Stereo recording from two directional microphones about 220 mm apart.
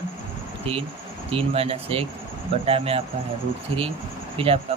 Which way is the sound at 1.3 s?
25° right (ahead or behind).